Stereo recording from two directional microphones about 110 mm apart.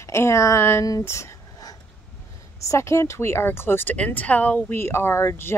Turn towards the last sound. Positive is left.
turn(degrees=25)  # may be behind; listen again after turning